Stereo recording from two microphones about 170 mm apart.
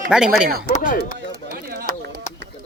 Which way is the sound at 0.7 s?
55° left (ahead or behind).